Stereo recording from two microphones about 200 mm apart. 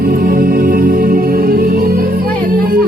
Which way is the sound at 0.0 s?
45° right (ahead or behind).